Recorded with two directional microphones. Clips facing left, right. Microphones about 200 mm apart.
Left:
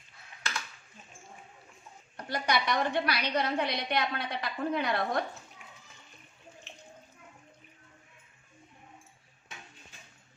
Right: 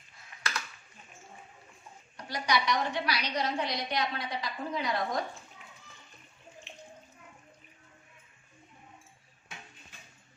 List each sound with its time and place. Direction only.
2.1 s a woman's voice: 55° left (ahead or behind)